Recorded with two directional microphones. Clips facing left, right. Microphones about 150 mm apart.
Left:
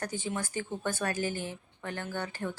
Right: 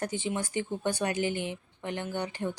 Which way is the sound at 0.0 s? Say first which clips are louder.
Right 3 dB; 20° right (ahead or behind).